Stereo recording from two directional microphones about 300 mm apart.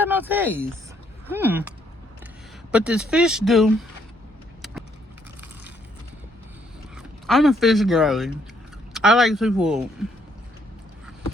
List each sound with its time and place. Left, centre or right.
0.0 s speech: centre
2.7 s speech: centre
4.6 s keys jangling: centre
6.9 s speech: centre